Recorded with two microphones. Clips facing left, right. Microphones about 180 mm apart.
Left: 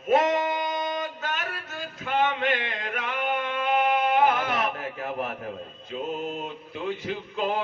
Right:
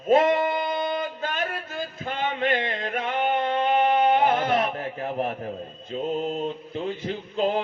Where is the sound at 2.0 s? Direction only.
35° right (ahead or behind).